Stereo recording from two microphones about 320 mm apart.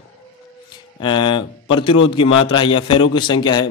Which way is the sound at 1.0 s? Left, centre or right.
Centre.